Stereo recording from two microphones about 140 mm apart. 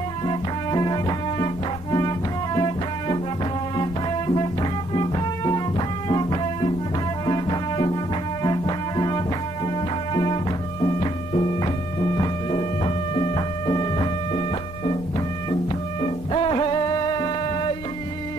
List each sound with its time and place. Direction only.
0.2 s music: 35° left (ahead or behind)